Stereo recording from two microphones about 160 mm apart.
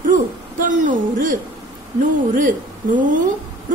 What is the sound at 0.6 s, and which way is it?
Speech, 55° right (ahead or behind).